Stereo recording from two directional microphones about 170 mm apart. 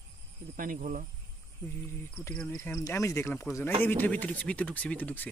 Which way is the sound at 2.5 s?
20° left (ahead or behind).